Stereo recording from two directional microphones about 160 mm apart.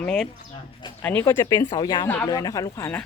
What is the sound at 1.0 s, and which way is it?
Speech, 15° left (ahead or behind).